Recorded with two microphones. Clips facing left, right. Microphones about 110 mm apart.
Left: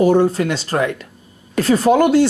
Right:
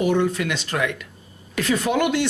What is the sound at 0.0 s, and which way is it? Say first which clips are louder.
Speech: left 7 dB; 35° left (ahead or behind).